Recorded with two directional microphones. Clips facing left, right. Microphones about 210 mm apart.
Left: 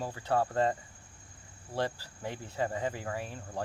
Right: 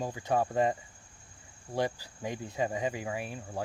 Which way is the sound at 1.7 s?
15° right (ahead or behind).